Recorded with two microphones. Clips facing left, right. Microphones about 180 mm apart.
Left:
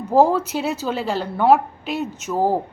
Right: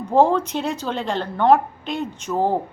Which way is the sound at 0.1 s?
5° left (ahead or behind).